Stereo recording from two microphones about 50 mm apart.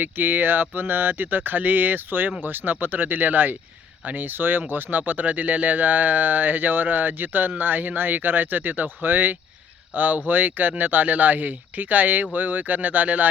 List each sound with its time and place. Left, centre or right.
0.0 s speech: right